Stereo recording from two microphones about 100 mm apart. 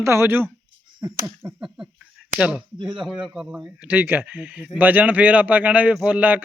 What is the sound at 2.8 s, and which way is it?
Speech, 5° right (ahead or behind).